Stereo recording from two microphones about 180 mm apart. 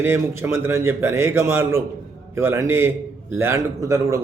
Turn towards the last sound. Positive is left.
turn(degrees=-15)  # may be behind; listen again after turning